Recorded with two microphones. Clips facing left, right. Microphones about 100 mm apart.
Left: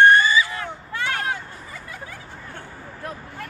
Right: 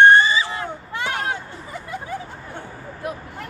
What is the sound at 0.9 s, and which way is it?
Hubbub, 20° right (ahead or behind).